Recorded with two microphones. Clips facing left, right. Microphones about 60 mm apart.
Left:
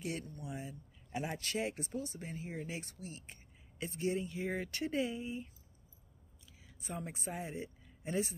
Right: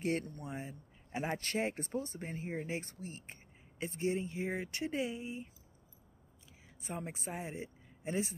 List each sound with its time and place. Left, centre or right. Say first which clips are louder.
0.0 s speech: right 6 dB; right
6.8 s speech: right 1 dB; right